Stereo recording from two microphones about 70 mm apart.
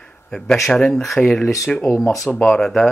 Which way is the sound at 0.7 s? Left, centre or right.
Centre.